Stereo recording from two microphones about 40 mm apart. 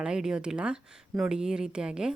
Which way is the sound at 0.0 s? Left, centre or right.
Centre.